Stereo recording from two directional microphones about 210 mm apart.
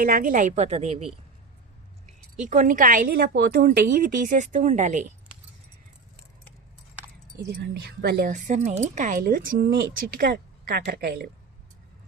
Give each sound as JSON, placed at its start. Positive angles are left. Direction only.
{"t": 0.0, "sound": "a woman's voice", "side_deg": -45}
{"t": 2.5, "sound": "a woman's voice", "side_deg": -40}
{"t": 7.4, "sound": "a woman's voice", "side_deg": -50}
{"t": 8.3, "sound": "a woman's voice", "side_deg": -35}